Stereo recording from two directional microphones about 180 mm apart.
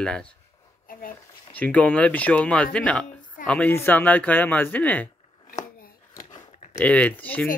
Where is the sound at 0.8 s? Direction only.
50° left (ahead or behind).